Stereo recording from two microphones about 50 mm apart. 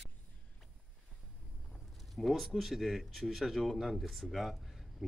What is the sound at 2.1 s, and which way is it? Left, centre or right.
Speech, centre.